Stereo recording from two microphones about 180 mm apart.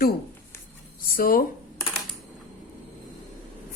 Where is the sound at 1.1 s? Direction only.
50° left (ahead or behind).